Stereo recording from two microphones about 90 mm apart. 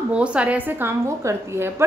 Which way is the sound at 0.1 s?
10° right (ahead or behind).